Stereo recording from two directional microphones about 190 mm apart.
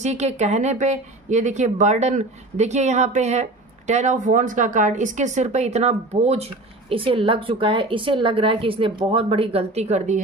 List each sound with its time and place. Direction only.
0.0 s a woman's voice: 35° right (ahead or behind)